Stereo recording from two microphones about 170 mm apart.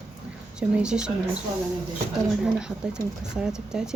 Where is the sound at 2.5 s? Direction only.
5° right (ahead or behind).